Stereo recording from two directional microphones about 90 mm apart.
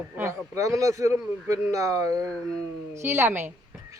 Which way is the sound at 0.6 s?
35° right (ahead or behind).